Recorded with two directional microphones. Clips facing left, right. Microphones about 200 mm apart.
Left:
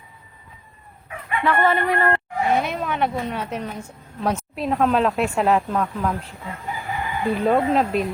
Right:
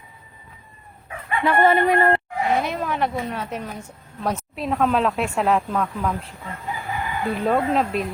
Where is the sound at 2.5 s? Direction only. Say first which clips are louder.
Even; centre (ahead or behind).